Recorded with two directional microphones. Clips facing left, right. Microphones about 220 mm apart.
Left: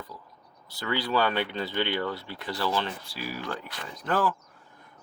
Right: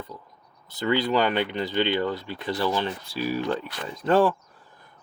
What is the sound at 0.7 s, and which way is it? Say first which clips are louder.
Speech: right 5 dB; 20° right (ahead or behind).